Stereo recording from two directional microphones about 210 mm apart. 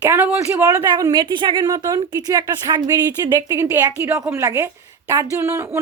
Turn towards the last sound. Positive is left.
turn(degrees=-10)  # may be behind; listen again after turning